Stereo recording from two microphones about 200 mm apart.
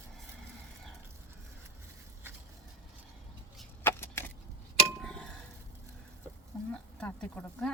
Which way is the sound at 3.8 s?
10° left (ahead or behind).